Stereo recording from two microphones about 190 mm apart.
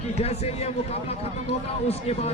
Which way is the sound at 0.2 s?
35° left (ahead or behind).